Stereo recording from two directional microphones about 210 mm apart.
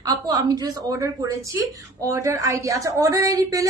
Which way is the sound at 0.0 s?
15° right (ahead or behind).